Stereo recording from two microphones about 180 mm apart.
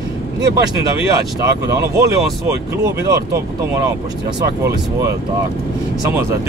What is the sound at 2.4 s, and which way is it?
Speech, 15° right (ahead or behind).